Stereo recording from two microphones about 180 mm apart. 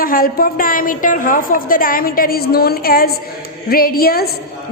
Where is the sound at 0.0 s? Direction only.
55° left (ahead or behind).